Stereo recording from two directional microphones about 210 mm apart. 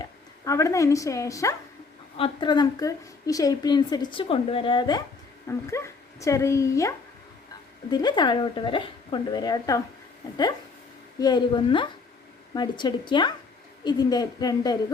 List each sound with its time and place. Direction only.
0.0 s a woman's voice: 15° left (ahead or behind)
11.2 s a woman's voice: 20° left (ahead or behind)